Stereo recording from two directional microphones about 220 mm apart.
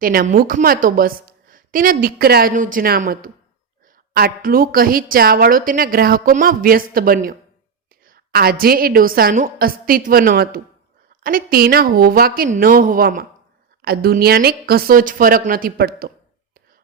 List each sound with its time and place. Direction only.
0.0 s a woman's voice: 40° right (ahead or behind)